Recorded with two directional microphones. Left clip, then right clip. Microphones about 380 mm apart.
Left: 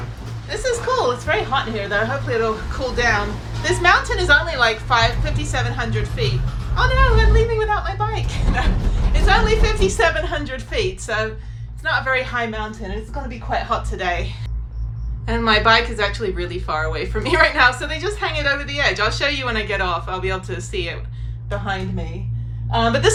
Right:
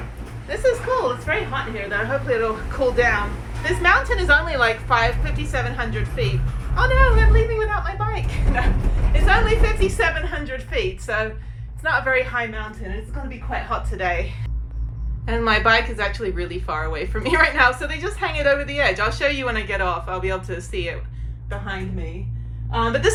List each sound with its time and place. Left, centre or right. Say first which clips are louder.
0.4 s a woman's voice: right 1 dB; centre
13.7 s a woman's voice: left 2 dB; centre
15.3 s a woman's voice: left 2 dB; centre
22.7 s a woman's voice: left 3 dB; centre